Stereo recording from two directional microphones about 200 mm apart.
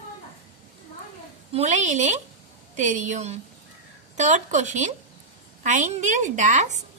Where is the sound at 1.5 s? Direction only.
35° right (ahead or behind).